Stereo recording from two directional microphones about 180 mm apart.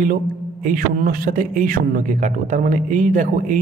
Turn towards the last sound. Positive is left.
turn(degrees=-45)  # may be behind; listen again after turning